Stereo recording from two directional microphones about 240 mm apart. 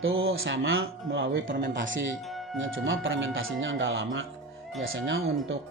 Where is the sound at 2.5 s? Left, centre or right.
Right.